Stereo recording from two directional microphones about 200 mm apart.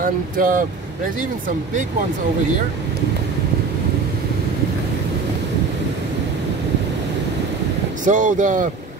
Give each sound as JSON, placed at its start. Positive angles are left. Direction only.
{"t": 0.0, "sound": "speech", "side_deg": -45}
{"t": 8.0, "sound": "speech", "side_deg": -40}